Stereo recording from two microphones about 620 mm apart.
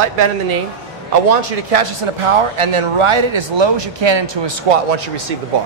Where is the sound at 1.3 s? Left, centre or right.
Right.